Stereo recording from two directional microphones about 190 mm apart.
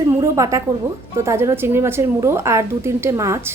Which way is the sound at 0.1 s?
15° right (ahead or behind).